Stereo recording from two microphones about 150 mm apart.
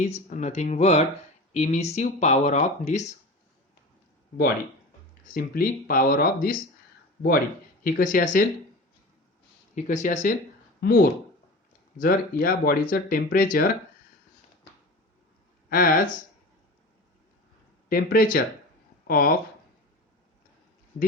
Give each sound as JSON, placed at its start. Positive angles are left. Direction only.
{"t": 0.0, "sound": "speech", "side_deg": 50}
{"t": 5.3, "sound": "speech", "side_deg": 70}
{"t": 7.9, "sound": "speech", "side_deg": 65}
{"t": 9.7, "sound": "speech", "side_deg": 55}
{"t": 10.8, "sound": "speech", "side_deg": 80}
{"t": 15.7, "sound": "speech", "side_deg": 75}
{"t": 17.8, "sound": "speech", "side_deg": 75}